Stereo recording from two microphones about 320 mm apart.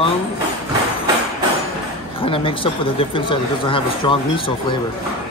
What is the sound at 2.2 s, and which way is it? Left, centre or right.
Speech, centre.